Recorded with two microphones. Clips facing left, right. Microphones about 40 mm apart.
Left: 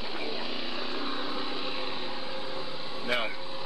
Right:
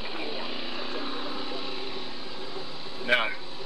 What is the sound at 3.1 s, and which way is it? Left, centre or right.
Speech, right.